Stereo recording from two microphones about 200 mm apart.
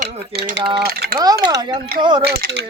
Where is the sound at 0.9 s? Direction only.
50° right (ahead or behind).